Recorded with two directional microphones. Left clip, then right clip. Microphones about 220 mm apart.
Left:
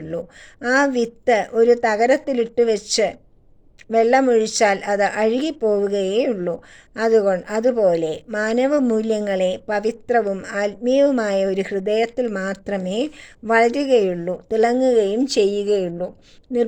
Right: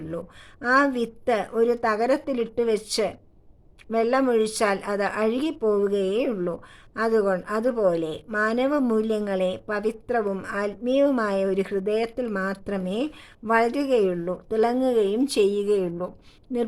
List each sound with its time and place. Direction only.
0.6 s a woman's voice: 10° left (ahead or behind)